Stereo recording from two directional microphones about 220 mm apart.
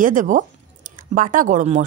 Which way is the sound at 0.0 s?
35° right (ahead or behind).